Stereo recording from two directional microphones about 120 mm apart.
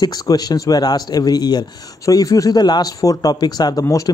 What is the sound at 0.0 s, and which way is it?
Speech, 30° left (ahead or behind).